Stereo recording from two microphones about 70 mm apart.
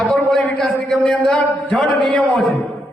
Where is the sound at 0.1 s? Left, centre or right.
Centre.